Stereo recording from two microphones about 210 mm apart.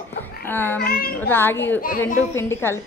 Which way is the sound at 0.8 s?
45° left (ahead or behind).